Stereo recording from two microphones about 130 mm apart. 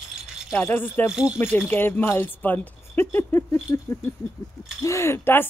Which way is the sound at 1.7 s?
15° left (ahead or behind).